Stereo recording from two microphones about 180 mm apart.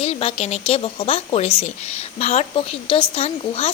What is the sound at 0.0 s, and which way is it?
Speech, 30° left (ahead or behind).